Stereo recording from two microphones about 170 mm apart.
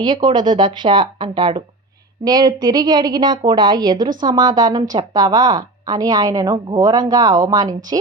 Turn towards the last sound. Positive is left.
turn(degrees=-20)  # may be behind; listen again after turning